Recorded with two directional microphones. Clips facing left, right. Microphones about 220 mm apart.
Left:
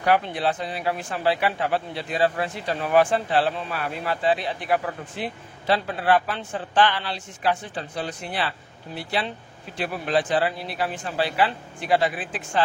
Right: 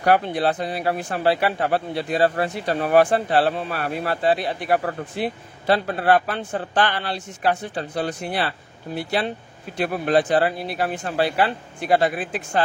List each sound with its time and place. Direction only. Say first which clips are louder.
0.0 s speech: right 3 dB; 45° right (ahead or behind)